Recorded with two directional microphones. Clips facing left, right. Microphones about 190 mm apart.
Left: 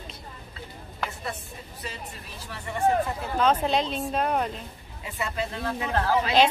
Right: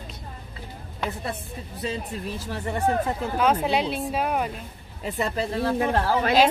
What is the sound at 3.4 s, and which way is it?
Speech, 10° right (ahead or behind).